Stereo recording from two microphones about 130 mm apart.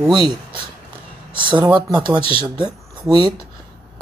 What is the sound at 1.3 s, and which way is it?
Speech, 40° right (ahead or behind).